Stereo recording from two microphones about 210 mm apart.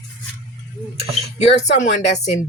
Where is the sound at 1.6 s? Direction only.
35° left (ahead or behind).